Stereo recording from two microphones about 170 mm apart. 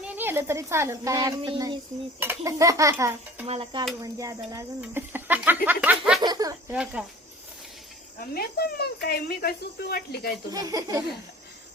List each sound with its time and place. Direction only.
0.2 s speech: 15° right (ahead or behind)
2.1 s speech: 15° right (ahead or behind)
3.4 s cricket: 35° right (ahead or behind)
4.0 s speech: 20° right (ahead or behind)
6.2 s speech: 20° right (ahead or behind)
7.0 s speech: 5° right (ahead or behind)
8.2 s speech: 60° left (ahead or behind)
10.5 s speech: 20° right (ahead or behind)